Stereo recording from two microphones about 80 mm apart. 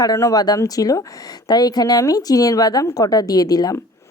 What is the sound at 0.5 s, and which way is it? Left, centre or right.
Speech, left.